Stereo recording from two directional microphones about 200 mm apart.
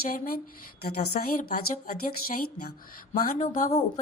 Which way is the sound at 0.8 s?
50° left (ahead or behind).